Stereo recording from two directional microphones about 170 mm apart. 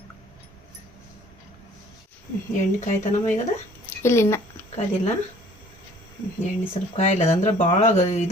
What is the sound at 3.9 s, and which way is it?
Speech, 15° left (ahead or behind).